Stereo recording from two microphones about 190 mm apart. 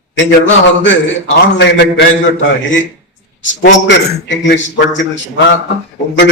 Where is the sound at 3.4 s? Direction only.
65° left (ahead or behind).